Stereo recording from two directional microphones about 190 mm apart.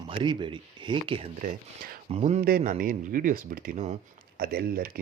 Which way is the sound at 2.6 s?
45° right (ahead or behind).